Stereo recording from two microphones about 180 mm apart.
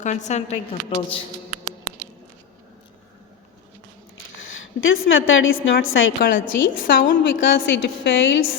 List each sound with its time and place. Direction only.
0.0 s a woman's voice: 40° left (ahead or behind)
4.8 s a woman's voice: 90° left
6.3 s a woman's voice: 50° left (ahead or behind)
7.5 s a woman's voice: 75° left (ahead or behind)